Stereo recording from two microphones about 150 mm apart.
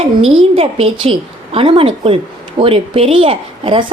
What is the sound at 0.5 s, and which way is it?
A woman's voice, 40° right (ahead or behind).